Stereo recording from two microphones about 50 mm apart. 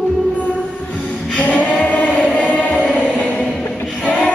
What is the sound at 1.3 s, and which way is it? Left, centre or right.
Choir, left.